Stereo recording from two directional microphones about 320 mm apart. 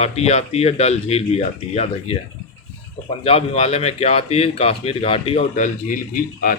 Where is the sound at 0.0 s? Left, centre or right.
Centre.